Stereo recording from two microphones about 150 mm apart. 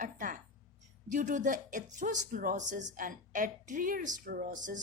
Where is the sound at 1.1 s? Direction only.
60° right (ahead or behind).